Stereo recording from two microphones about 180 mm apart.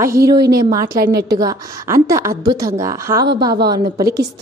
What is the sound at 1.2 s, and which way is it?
A woman's voice, 20° right (ahead or behind).